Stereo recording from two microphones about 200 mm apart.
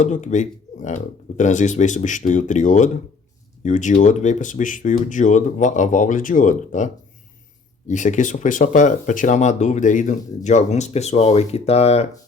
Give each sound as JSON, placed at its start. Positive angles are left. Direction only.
{"t": 0.0, "sound": "speech", "side_deg": 35}